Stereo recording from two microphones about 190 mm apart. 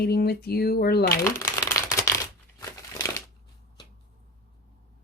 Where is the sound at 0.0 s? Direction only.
55° left (ahead or behind).